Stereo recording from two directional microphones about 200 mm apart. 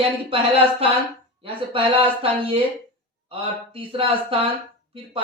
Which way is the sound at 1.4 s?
25° right (ahead or behind).